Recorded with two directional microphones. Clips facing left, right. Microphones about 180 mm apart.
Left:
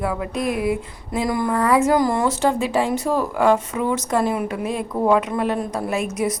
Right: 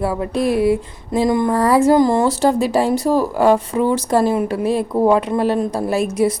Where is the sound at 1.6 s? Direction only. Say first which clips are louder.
Right 4 dB; 35° right (ahead or behind).